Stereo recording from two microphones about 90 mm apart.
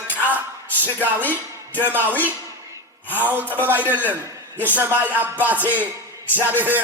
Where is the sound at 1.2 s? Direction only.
20° left (ahead or behind).